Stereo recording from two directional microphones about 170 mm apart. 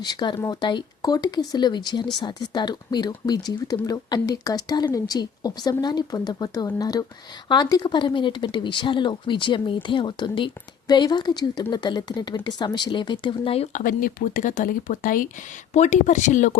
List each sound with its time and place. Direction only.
0.0 s speech: 25° left (ahead or behind)
13.8 s speech: 55° left (ahead or behind)